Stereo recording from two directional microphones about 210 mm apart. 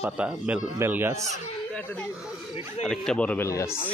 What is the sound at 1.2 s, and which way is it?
Speech, 5° left (ahead or behind).